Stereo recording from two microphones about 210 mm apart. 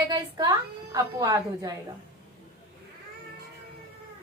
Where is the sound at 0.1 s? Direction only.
20° right (ahead or behind).